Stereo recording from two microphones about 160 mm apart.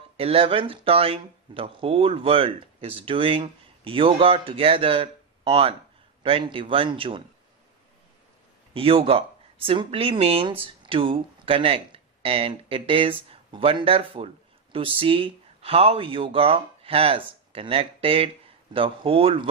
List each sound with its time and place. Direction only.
0.2 s speech: 35° right (ahead or behind)
8.7 s speech: 35° right (ahead or behind)